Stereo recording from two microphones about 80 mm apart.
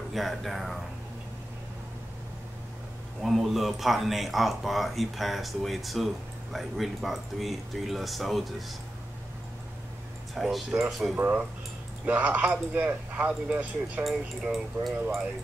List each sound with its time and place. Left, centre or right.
0.1 s speech: centre
3.2 s speech: centre
10.3 s speech: centre
11.1 s speech: right
14.0 s speech: centre